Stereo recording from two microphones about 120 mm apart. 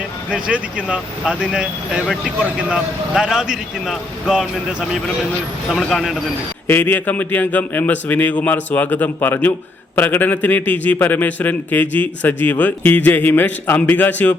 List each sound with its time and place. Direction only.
0.3 s a man's voice: 5° right (ahead or behind)
5.7 s a man's voice: centre (ahead or behind)
6.7 s speech: 15° left (ahead or behind)